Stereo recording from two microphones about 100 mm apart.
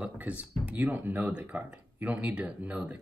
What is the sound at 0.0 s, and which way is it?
Speech, 15° right (ahead or behind).